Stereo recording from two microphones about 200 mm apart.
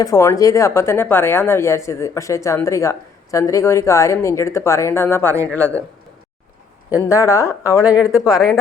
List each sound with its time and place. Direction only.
0.0 s speech: 15° left (ahead or behind)
7.1 s speech: 15° left (ahead or behind)
7.8 s speech: 5° right (ahead or behind)
8.1 s speech: 20° left (ahead or behind)